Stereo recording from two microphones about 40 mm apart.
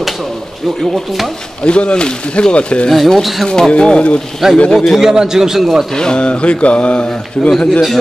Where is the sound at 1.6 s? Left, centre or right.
Left.